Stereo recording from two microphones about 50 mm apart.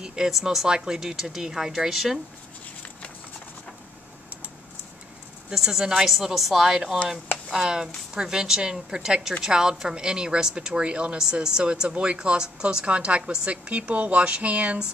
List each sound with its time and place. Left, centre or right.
0.0 s speech: centre
5.5 s a woman's voice: centre
13.5 s speech: right